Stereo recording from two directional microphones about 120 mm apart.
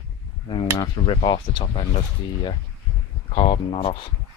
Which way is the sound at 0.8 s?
40° left (ahead or behind).